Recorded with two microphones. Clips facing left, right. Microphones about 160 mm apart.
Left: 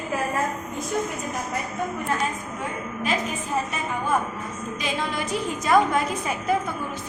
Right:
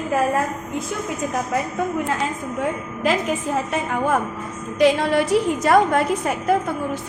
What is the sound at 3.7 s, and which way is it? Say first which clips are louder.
Speech: right 5 dB; 85° right.